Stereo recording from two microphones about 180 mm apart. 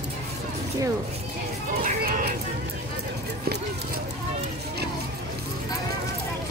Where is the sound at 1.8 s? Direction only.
55° right (ahead or behind).